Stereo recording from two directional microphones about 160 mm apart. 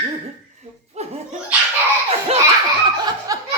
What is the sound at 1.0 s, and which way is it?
Laughter, 45° right (ahead or behind).